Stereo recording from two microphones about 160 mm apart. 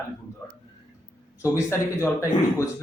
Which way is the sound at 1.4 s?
15° left (ahead or behind).